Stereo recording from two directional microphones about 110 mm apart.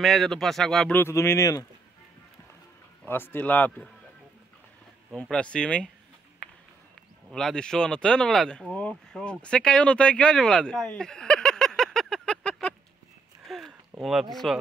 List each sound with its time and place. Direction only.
0.0 s speech: centre (ahead or behind)
0.9 s speech: 25° left (ahead or behind)
3.1 s speech: 20° left (ahead or behind)
5.1 s speech: 10° left (ahead or behind)
7.2 s speech: 5° left (ahead or behind)
13.5 s a sound: centre (ahead or behind)
14.3 s speech: centre (ahead or behind)